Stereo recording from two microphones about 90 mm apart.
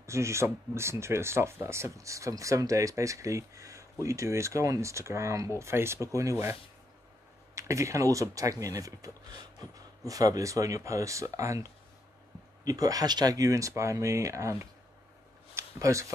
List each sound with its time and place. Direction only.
0.0 s speech: 30° right (ahead or behind)
7.5 s speech: 35° right (ahead or behind)
15.5 s a sound: 35° right (ahead or behind)